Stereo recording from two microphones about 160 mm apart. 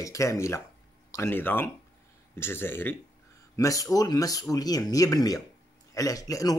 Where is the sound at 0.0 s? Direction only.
20° left (ahead or behind).